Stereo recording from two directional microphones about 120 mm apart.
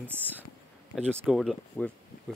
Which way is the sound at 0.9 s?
Centre (ahead or behind).